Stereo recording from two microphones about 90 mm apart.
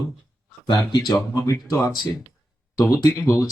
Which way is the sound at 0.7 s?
60° left (ahead or behind).